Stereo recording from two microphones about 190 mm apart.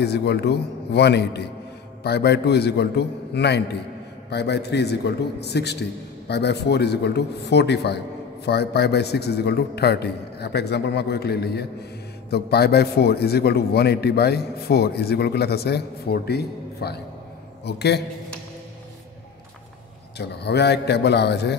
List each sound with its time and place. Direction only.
0.0 s a man's voice: 60° left (ahead or behind)
20.2 s a man's voice: 60° left (ahead or behind)